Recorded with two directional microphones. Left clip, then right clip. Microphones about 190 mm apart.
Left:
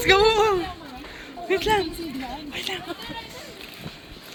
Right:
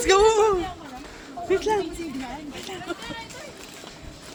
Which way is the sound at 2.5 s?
5° left (ahead or behind).